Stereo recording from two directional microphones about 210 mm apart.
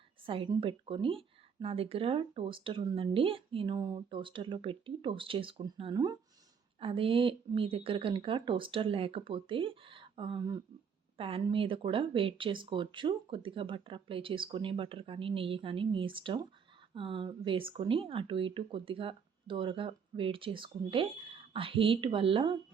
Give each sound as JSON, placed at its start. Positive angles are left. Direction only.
{"t": 0.3, "sound": "speech", "side_deg": -25}